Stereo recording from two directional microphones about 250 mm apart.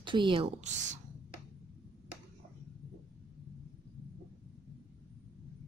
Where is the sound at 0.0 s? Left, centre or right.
Centre.